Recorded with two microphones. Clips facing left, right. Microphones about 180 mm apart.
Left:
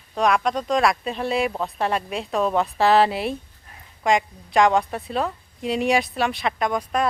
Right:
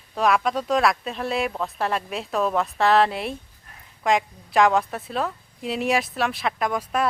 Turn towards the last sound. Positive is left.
turn(degrees=-5)  # may be behind; listen again after turning